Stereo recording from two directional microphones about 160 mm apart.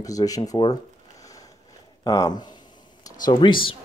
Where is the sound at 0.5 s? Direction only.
25° left (ahead or behind).